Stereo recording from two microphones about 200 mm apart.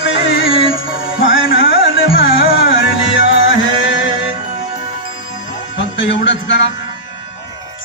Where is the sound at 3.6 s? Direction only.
70° left (ahead or behind).